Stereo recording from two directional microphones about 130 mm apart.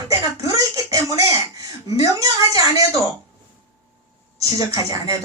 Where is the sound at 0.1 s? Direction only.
25° right (ahead or behind).